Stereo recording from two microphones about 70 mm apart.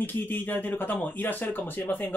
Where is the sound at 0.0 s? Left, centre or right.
Left.